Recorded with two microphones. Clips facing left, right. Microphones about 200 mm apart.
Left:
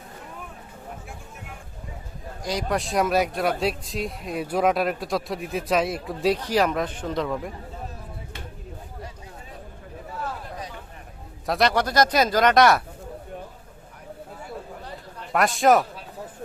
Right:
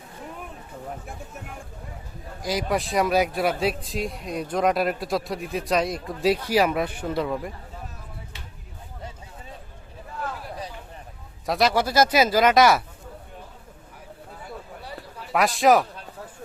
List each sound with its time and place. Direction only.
2.4 s speech: 5° right (ahead or behind)
11.4 s speech: centre (ahead or behind)
15.3 s speech: centre (ahead or behind)